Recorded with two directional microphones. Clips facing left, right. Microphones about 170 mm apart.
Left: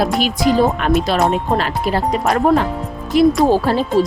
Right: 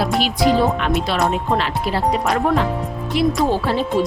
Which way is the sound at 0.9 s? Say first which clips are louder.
Left 4 dB; 40° left (ahead or behind).